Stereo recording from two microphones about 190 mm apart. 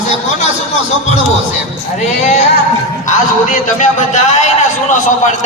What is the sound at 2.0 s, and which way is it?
A man's voice, 35° left (ahead or behind).